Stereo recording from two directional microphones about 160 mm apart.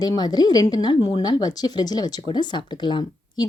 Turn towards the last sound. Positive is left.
turn(degrees=30)  # may be behind; listen again after turning